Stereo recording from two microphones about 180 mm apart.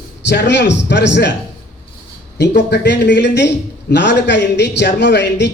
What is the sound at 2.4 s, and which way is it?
A man's voice, 70° left (ahead or behind).